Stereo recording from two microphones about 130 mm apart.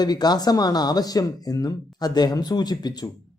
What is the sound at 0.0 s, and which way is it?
Speech, 30° left (ahead or behind).